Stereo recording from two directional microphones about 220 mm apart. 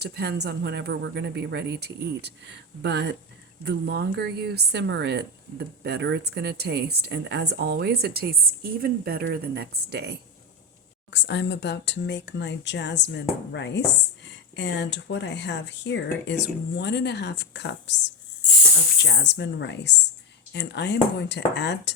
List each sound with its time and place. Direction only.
0.0 s a woman's voice: 45° right (ahead or behind)
11.1 s speech: 50° left (ahead or behind)
19.0 s speech: 50° left (ahead or behind)